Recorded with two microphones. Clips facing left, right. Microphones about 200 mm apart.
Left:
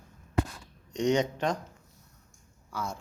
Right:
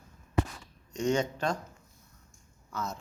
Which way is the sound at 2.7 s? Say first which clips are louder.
Left 1 dB; 10° left (ahead or behind).